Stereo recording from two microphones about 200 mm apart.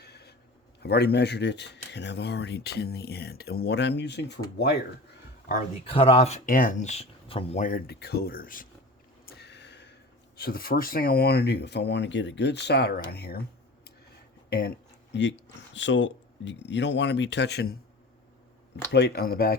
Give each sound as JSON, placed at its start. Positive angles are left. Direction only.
{"t": 0.0, "sound": "a sound", "side_deg": 55}
{"t": 0.8, "sound": "speech", "side_deg": 55}
{"t": 5.5, "sound": "speech", "side_deg": 40}
{"t": 5.8, "sound": "speech", "side_deg": 30}
{"t": 9.2, "sound": "a sound", "side_deg": 55}
{"t": 10.3, "sound": "speech", "side_deg": 50}
{"t": 15.1, "sound": "speech", "side_deg": 65}
{"t": 18.9, "sound": "speech", "side_deg": 55}